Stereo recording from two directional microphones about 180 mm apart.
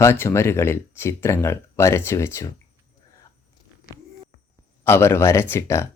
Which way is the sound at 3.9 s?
55° left (ahead or behind).